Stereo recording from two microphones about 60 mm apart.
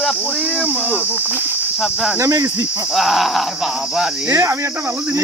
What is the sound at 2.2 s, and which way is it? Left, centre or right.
Cricket, right.